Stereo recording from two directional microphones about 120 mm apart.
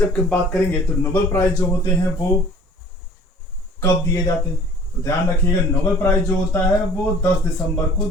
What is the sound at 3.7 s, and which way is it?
Speech, 20° left (ahead or behind).